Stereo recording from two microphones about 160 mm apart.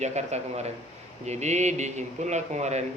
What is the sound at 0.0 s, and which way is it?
Speech, 45° right (ahead or behind).